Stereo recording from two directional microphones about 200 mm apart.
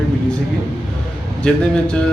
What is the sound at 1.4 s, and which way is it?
Speech, 5° left (ahead or behind).